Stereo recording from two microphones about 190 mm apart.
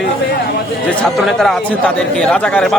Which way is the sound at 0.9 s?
Centre (ahead or behind).